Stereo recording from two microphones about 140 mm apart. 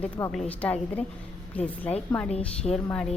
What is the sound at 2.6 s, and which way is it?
Speech, 30° left (ahead or behind).